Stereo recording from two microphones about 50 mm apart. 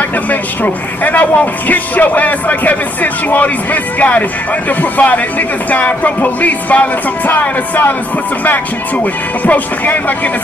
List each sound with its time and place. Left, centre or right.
0.3 s speech: left
8.9 s speech: left